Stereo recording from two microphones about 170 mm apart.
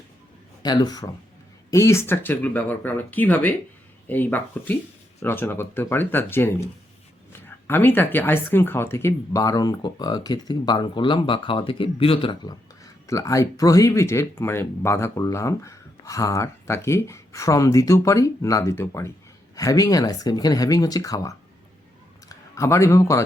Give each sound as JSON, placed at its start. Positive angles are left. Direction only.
{"t": 0.6, "sound": "speech", "side_deg": 25}